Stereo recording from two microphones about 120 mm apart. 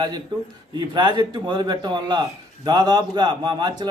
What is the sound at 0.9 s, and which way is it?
A man's voice, 40° right (ahead or behind).